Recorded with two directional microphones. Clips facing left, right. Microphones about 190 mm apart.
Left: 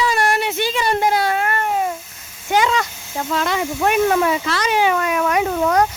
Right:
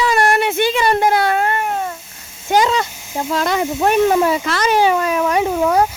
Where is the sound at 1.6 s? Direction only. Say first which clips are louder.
Left 1 dB; 10° left (ahead or behind).